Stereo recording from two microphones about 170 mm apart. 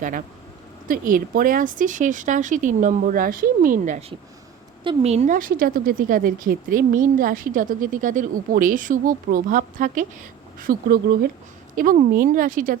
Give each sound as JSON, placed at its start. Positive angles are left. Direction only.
{"t": 0.9, "sound": "speech", "side_deg": -55}
{"t": 4.8, "sound": "speech", "side_deg": -35}
{"t": 10.6, "sound": "speech", "side_deg": -60}
{"t": 11.8, "sound": "speech", "side_deg": -55}